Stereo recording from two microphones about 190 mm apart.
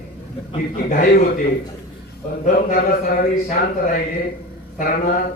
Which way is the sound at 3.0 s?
45° left (ahead or behind).